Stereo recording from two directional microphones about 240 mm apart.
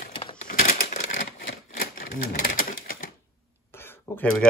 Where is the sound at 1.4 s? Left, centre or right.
Left.